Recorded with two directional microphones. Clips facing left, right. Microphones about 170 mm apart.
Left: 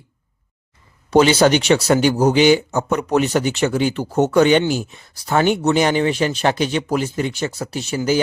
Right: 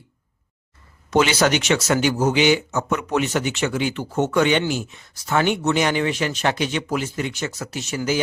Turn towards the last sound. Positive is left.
turn(degrees=30)  # may be behind; listen again after turning